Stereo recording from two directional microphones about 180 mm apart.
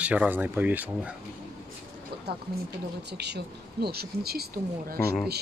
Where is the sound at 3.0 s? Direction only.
70° right (ahead or behind).